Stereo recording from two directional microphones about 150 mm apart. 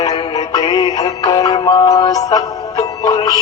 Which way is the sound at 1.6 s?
40° left (ahead or behind).